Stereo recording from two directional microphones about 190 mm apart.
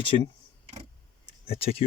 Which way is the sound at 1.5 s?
30° left (ahead or behind).